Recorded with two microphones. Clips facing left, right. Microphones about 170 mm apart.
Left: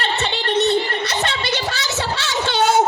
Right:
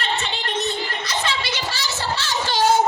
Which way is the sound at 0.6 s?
65° left (ahead or behind).